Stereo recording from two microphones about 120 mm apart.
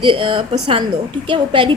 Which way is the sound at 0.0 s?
45° right (ahead or behind).